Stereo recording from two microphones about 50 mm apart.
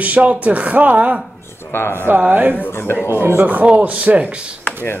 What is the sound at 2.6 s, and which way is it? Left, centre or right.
Speech, left.